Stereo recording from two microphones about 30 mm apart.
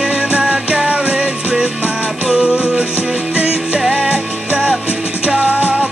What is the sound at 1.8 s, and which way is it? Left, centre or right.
Music, right.